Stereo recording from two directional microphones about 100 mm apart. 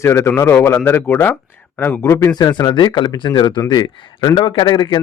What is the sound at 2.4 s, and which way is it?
A man's voice, 45° left (ahead or behind).